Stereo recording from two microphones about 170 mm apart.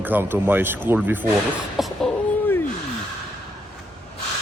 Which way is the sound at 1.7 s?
Centre (ahead or behind).